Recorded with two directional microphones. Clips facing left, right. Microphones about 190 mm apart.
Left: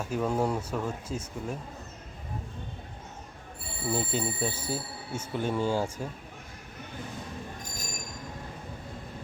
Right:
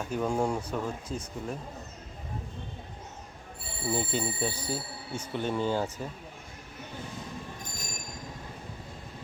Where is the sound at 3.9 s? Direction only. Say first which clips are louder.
Left 1 dB; 5° left (ahead or behind).